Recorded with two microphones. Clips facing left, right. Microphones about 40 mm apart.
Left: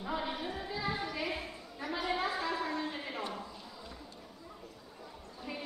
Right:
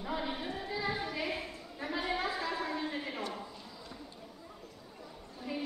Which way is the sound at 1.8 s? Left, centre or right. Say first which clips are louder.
Right 1 dB; centre.